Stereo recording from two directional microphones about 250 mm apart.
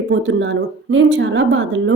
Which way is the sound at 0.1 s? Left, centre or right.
Right.